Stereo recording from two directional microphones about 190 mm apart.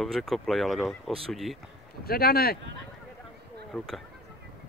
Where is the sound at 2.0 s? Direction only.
50° left (ahead or behind).